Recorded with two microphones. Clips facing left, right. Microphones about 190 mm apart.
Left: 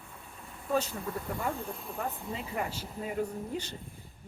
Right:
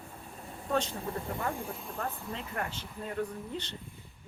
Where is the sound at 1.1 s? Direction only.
30° right (ahead or behind).